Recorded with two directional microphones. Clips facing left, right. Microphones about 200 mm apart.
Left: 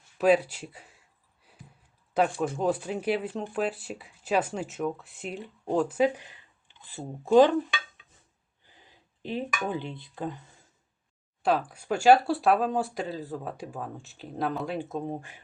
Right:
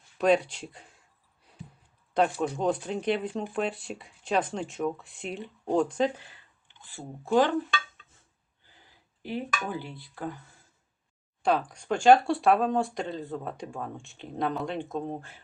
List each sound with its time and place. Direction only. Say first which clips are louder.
0.2 s speech: left 1 dB; 5° left (ahead or behind)
2.1 s speech: even; 5° left (ahead or behind)
8.6 s speech: left 2 dB; 20° left (ahead or behind)
11.4 s speech: even; 5° left (ahead or behind)